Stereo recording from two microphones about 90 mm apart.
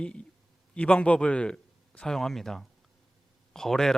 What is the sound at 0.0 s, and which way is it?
A man's voice, 15° left (ahead or behind).